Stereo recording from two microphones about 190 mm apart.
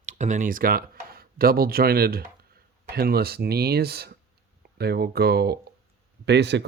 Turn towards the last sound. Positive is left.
turn(degrees=-65)  # may be behind; listen again after turning